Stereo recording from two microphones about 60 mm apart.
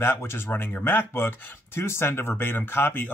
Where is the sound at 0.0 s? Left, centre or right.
Left.